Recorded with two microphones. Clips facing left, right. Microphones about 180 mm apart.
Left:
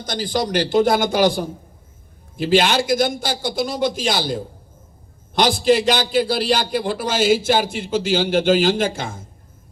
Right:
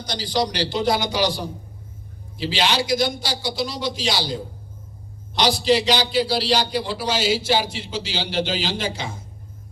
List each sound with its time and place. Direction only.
0.0 s a man's voice: 50° left (ahead or behind)